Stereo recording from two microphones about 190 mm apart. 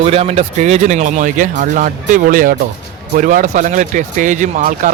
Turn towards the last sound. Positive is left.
turn(degrees=-40)  # may be behind; listen again after turning